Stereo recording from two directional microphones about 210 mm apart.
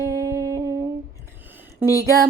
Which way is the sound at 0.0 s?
15° right (ahead or behind).